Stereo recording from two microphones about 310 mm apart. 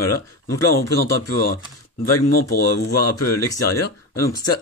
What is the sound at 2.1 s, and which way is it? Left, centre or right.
Speech, left.